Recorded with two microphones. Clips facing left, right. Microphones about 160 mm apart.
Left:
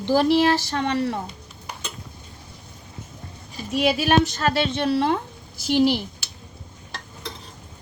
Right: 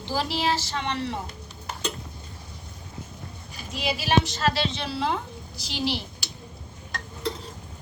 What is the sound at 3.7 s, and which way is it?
A woman's voice, 55° left (ahead or behind).